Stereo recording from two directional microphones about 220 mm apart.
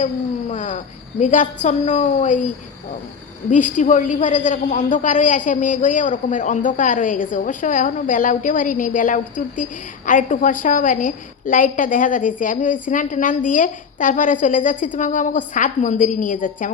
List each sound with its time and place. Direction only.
0.5 s a sound: 35° left (ahead or behind)
1.2 s a woman's voice: 35° left (ahead or behind)
3.5 s a woman's voice: 35° left (ahead or behind)